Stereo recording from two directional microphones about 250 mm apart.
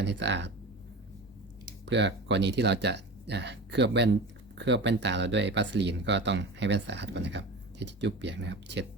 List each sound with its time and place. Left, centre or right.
0.0 s speech: right
1.9 s speech: right